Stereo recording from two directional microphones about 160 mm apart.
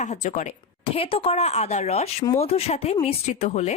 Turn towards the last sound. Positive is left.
turn(degrees=45)  # may be behind; listen again after turning